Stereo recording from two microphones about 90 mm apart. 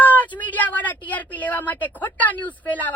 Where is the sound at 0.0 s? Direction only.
20° left (ahead or behind).